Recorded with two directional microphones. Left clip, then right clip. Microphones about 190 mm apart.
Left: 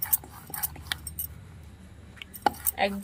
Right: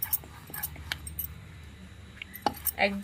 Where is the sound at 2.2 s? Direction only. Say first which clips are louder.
Left 4 dB; 25° left (ahead or behind).